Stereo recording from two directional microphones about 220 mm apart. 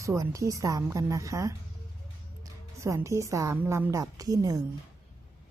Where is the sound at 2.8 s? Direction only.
15° right (ahead or behind).